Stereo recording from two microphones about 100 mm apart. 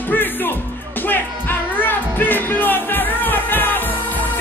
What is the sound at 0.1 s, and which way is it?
Music, 20° left (ahead or behind).